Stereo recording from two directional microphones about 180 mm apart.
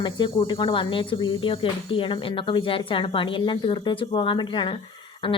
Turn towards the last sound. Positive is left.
turn(degrees=30)  # may be behind; listen again after turning